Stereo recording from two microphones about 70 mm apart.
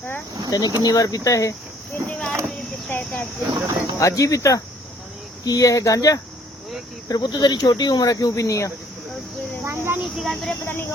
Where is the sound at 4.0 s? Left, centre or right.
Left.